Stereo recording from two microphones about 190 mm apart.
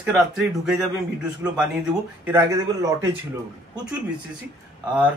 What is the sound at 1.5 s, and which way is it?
A man's voice, 5° right (ahead or behind).